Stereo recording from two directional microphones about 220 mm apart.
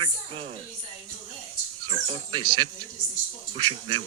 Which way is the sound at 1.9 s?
25° right (ahead or behind).